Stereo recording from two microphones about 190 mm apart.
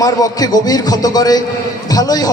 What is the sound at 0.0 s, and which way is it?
A man's voice, 20° left (ahead or behind).